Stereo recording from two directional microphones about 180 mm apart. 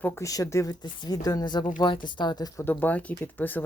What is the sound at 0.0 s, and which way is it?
Speech, 15° left (ahead or behind).